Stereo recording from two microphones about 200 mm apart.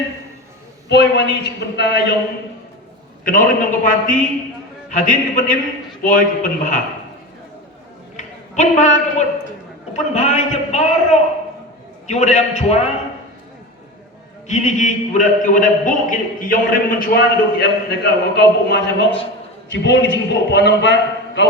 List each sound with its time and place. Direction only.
0.9 s a man's voice: 55° left (ahead or behind)
3.2 s a man's voice: 45° left (ahead or behind)
8.1 s a sound: 35° left (ahead or behind)
9.9 s a man's voice: 35° left (ahead or behind)
14.4 s a man's voice: 35° left (ahead or behind); by 21.4 s 60° left (ahead or behind)